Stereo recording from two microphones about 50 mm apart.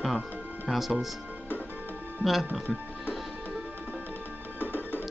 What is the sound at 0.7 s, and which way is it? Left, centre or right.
Speech, centre.